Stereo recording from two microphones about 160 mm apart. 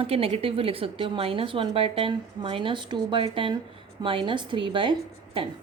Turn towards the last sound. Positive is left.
turn(degrees=-30)  # may be behind; listen again after turning